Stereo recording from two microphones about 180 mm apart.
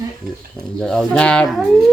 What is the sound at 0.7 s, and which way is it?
Speech, centre (ahead or behind).